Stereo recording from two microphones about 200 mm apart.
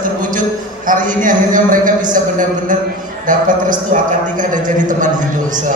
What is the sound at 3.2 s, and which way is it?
A man's voice, 40° right (ahead or behind).